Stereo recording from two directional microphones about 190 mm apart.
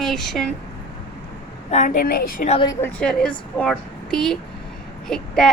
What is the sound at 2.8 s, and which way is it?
A woman's voice, 5° left (ahead or behind).